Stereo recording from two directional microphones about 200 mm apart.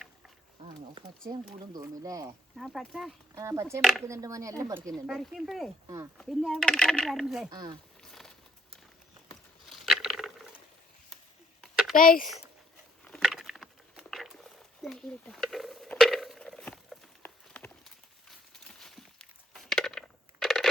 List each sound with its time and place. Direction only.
1.3 s speech: 20° right (ahead or behind)
2.6 s speech: centre (ahead or behind)
3.3 s speech: 15° right (ahead or behind)
3.8 s speech: centre (ahead or behind)
4.0 s speech: 15° right (ahead or behind)
5.0 s speech: centre (ahead or behind)
7.5 s speech: 20° right (ahead or behind)
8.0 s a sound: centre (ahead or behind)
9.6 s a sound: centre (ahead or behind)
11.6 s a sound: centre (ahead or behind)
11.9 s speech: 45° left (ahead or behind)
13.1 s a sound: centre (ahead or behind)